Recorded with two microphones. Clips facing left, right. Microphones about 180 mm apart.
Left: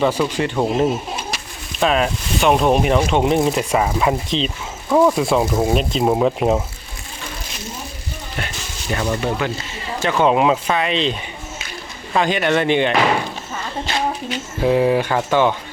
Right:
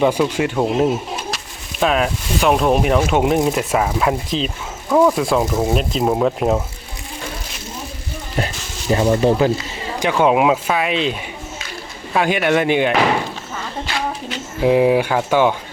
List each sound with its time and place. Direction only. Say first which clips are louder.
0.0 s speech: right 2 dB; 10° right (ahead or behind)
8.4 s speech: right 7 dB; 35° right (ahead or behind)
10.0 s speech: right 1 dB; 10° right (ahead or behind)
13.8 s a sound: left 3 dB; 20° left (ahead or behind)
14.6 s speech: right 2 dB; 10° right (ahead or behind)